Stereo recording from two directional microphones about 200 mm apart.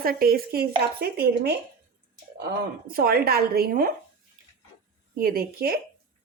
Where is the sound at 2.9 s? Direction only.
50° right (ahead or behind).